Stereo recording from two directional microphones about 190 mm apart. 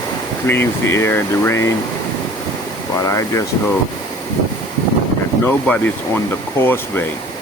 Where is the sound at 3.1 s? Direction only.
15° left (ahead or behind).